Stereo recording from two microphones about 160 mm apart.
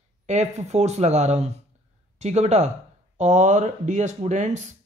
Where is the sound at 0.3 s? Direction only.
45° right (ahead or behind).